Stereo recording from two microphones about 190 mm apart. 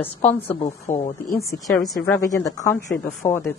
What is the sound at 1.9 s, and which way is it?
Speech, 10° left (ahead or behind).